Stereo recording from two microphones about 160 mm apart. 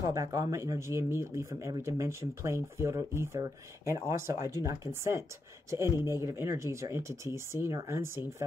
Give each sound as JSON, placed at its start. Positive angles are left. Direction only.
{"t": 0.0, "sound": "speech", "side_deg": -20}